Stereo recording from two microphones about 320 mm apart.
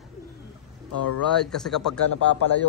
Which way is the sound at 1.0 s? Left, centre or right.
Left.